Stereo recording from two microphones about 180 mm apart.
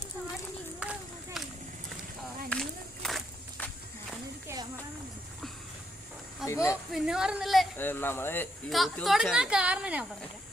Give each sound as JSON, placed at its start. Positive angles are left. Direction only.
{"t": 0.8, "sound": "run", "side_deg": -5}
{"t": 2.5, "sound": "a sound", "side_deg": 5}
{"t": 6.4, "sound": "a sound", "side_deg": 15}
{"t": 6.9, "sound": "speech", "side_deg": -5}
{"t": 7.8, "sound": "speech", "side_deg": 10}
{"t": 8.7, "sound": "speech", "side_deg": 0}